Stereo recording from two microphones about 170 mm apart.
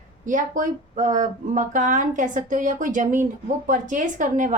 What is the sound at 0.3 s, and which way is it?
Speech, 50° right (ahead or behind).